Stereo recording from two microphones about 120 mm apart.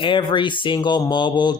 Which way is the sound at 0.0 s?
40° left (ahead or behind).